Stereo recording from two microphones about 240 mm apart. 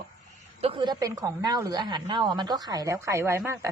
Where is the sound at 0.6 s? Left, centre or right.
Right.